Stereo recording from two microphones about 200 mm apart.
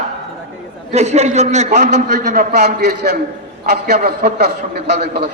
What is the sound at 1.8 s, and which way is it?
A man's voice, 55° right (ahead or behind).